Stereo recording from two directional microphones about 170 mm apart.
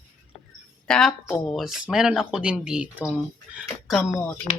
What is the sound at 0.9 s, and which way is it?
Speech, 5° left (ahead or behind).